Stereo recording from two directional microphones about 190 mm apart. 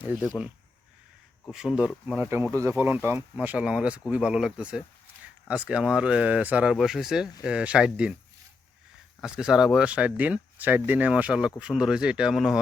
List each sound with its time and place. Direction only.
0.0 s speech: 5° right (ahead or behind)
1.5 s speech: 5° right (ahead or behind)
9.2 s speech: 5° right (ahead or behind)